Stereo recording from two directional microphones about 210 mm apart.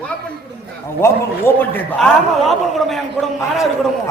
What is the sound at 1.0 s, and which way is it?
A man's voice, 10° left (ahead or behind).